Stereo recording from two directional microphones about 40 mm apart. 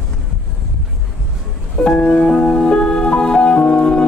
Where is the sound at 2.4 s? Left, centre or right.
Left.